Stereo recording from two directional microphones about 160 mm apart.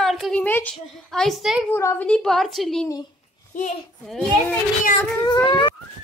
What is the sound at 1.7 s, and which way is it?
Speech, 15° left (ahead or behind).